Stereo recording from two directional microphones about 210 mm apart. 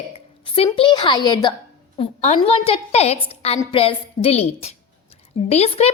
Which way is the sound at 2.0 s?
30° left (ahead or behind).